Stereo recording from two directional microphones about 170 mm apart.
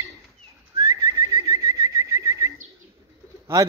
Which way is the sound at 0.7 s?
20° right (ahead or behind).